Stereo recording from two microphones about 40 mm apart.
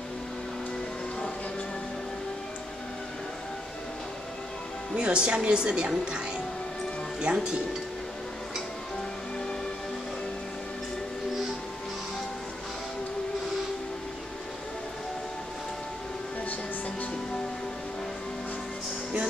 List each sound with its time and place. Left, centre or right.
4.9 s a woman's voice: right
7.2 s a woman's voice: right